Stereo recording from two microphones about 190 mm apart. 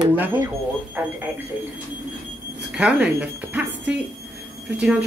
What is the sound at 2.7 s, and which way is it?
Speech, 5° right (ahead or behind).